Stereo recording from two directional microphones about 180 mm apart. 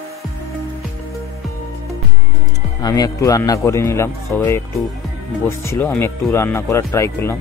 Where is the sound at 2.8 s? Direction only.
20° left (ahead or behind).